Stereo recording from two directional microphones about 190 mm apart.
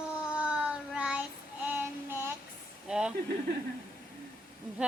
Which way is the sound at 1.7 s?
10° right (ahead or behind).